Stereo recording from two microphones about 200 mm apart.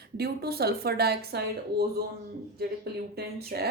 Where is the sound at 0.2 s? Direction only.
50° right (ahead or behind).